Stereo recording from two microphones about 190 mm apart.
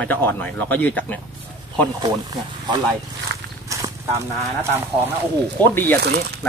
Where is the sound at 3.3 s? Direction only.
60° right (ahead or behind).